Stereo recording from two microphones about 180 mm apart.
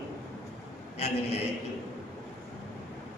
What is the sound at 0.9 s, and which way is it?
Speech, 35° left (ahead or behind).